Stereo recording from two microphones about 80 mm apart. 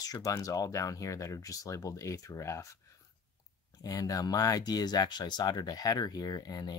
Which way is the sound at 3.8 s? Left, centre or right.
Left.